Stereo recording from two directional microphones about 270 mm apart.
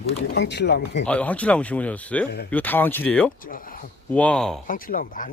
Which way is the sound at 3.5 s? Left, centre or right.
Left.